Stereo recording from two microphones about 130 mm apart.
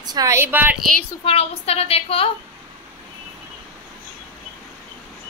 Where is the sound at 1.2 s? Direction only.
50° left (ahead or behind).